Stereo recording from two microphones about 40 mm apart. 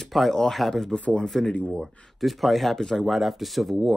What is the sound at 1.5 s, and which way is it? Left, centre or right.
Speech, left.